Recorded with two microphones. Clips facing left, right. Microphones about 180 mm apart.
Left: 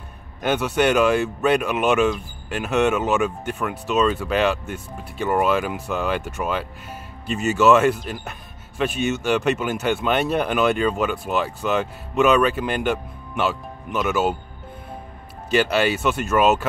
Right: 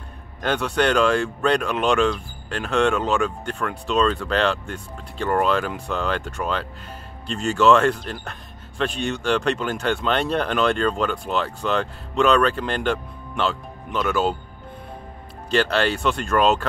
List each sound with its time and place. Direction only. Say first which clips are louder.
0.4 s speech: left 2 dB; 10° left (ahead or behind)
15.5 s speech: left 1 dB; 10° left (ahead or behind)